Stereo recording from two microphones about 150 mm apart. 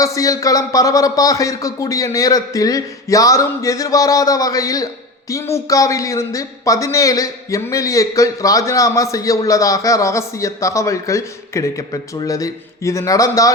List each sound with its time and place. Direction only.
0.0 s a man's voice: 20° left (ahead or behind)